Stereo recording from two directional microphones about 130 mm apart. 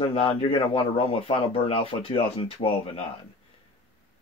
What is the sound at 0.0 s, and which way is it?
Speech, 45° left (ahead or behind).